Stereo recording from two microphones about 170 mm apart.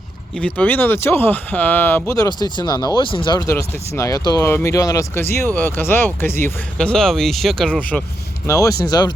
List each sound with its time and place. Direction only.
0.3 s speech: 10° left (ahead or behind)
8.4 s speech: 20° left (ahead or behind)